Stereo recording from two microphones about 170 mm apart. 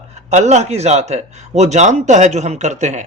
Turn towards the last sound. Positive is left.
turn(degrees=-45)  # may be behind; listen again after turning